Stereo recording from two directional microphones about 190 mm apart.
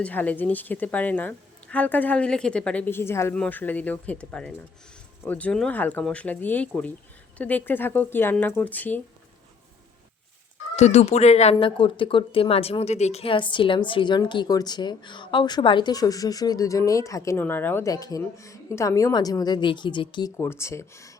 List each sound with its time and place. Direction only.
0.0 s a woman's voice: 10° left (ahead or behind)
10.8 s speech: 35° left (ahead or behind)
20.4 s a woman's voice: 15° left (ahead or behind)